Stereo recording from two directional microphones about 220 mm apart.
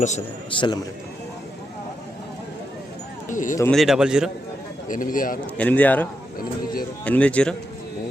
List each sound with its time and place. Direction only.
0.5 s a man's voice: 25° left (ahead or behind)
3.2 s speech: 35° left (ahead or behind)
3.6 s speech: centre (ahead or behind)
4.9 s speech: 40° left (ahead or behind)
5.5 s speech: 5° left (ahead or behind)